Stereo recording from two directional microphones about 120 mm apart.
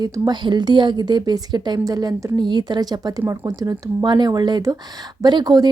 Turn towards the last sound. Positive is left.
turn(degrees=-35)  # may be behind; listen again after turning